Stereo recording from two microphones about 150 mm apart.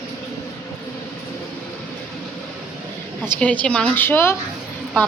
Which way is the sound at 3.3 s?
10° left (ahead or behind).